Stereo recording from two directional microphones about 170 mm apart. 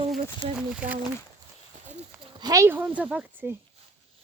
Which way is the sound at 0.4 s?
45° right (ahead or behind).